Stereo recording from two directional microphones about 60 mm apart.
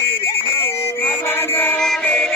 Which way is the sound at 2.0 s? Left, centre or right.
Centre.